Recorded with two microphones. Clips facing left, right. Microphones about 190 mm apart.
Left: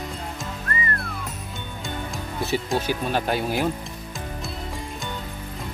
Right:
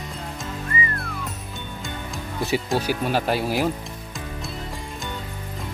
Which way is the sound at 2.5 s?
10° right (ahead or behind).